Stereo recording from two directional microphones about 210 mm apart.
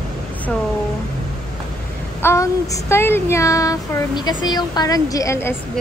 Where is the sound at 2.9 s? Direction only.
10° left (ahead or behind).